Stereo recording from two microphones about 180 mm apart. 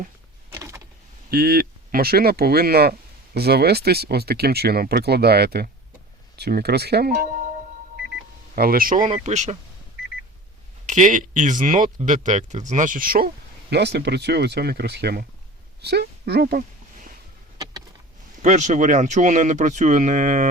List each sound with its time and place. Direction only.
0.5 s power windows: 15° right (ahead or behind)
1.3 s speech: 55° right (ahead or behind)
8.5 s speech: 55° right (ahead or behind)
10.8 s speech: 45° right (ahead or behind); by 15.3 s 60° right (ahead or behind)
15.8 s a sound: 65° right (ahead or behind)
18.4 s speech: 40° right (ahead or behind)